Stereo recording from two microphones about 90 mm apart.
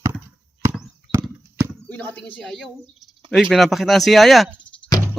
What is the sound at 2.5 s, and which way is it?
Speech, 5° left (ahead or behind).